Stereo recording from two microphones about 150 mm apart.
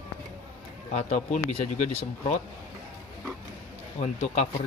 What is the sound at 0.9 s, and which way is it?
Speech, 50° left (ahead or behind).